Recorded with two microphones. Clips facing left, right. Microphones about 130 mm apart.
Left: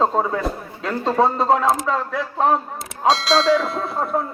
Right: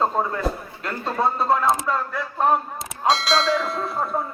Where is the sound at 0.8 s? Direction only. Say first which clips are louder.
Left 7 dB; 90° left.